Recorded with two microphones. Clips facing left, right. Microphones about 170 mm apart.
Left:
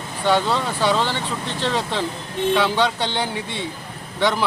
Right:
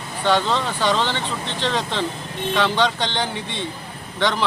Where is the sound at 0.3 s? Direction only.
10° left (ahead or behind).